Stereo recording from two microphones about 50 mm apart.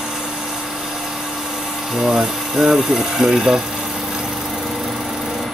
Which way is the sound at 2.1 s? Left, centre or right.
Centre.